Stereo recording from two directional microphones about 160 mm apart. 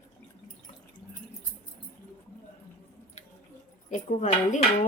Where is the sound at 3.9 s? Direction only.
50° left (ahead or behind).